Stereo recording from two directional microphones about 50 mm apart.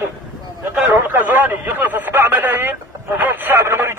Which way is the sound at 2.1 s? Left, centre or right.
Right.